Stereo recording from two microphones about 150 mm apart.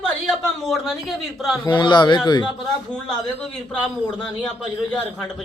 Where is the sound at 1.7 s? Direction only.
30° left (ahead or behind).